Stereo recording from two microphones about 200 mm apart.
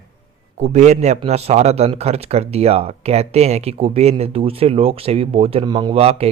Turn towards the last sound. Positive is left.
turn(degrees=-30)  # may be behind; listen again after turning